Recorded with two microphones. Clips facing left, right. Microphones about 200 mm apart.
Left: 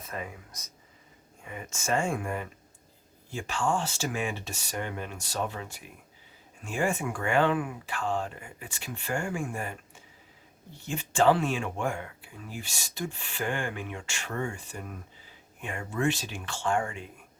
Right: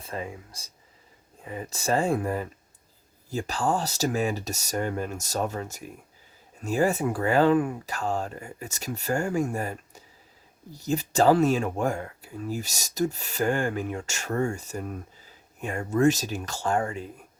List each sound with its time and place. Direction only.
0.0 s speech: 30° right (ahead or behind)